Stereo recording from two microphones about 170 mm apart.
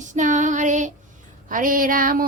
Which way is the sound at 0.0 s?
45° right (ahead or behind).